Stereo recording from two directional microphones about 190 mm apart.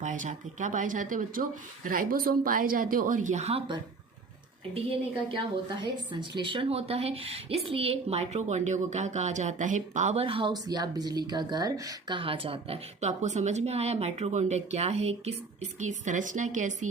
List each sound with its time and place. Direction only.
0.0 s a woman's voice: 40° right (ahead or behind)